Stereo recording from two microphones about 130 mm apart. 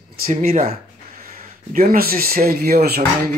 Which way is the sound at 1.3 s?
90° right.